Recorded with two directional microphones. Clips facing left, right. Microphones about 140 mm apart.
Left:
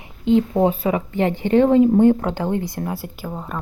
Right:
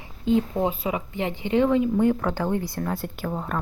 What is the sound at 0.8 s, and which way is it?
Speech, 45° left (ahead or behind).